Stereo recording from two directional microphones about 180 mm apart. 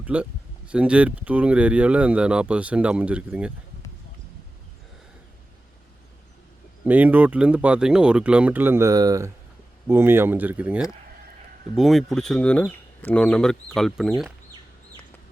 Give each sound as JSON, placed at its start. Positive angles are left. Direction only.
{"t": 0.0, "sound": "speech", "side_deg": -5}
{"t": 6.8, "sound": "speech", "side_deg": -10}